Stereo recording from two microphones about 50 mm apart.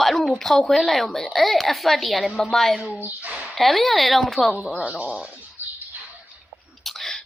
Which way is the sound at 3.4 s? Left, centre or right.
Centre.